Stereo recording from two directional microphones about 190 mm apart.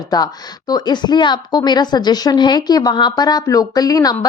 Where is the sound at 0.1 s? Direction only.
20° left (ahead or behind).